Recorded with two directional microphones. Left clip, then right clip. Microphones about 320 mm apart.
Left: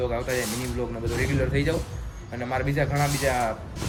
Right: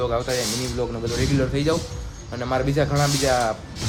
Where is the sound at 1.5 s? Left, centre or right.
Centre.